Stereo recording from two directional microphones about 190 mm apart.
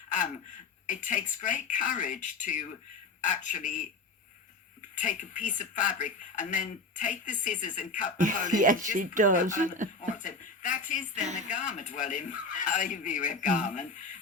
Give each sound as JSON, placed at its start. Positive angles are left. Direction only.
{"t": 0.1, "sound": "speech", "side_deg": 40}
{"t": 4.9, "sound": "speech", "side_deg": 40}
{"t": 8.2, "sound": "speech", "side_deg": -45}
{"t": 10.0, "sound": "speech", "side_deg": 40}